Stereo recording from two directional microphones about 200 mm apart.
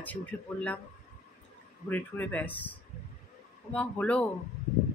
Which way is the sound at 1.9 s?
10° left (ahead or behind).